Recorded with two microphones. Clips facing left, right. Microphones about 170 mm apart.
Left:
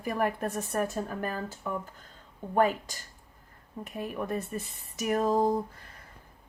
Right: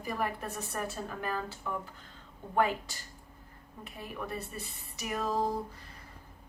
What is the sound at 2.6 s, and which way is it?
Speech, 45° left (ahead or behind).